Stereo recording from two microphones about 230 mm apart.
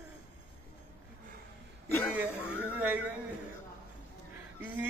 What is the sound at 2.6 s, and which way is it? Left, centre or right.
Music, centre.